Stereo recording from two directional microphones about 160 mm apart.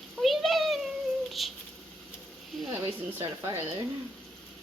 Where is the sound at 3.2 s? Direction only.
15° right (ahead or behind).